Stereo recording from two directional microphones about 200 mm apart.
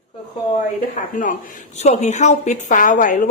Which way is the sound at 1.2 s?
40° left (ahead or behind).